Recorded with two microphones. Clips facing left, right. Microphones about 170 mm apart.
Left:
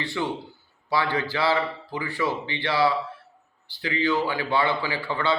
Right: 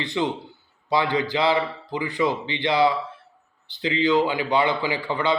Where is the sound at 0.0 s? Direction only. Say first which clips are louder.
Right 3 dB; 20° right (ahead or behind).